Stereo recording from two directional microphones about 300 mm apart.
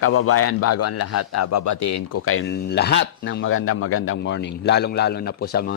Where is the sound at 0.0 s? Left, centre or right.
Left.